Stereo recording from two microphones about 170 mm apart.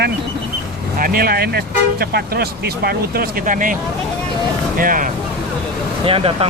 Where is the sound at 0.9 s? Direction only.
55° right (ahead or behind).